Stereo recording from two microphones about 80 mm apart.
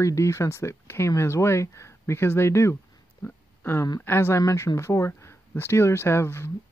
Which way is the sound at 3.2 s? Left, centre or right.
Left.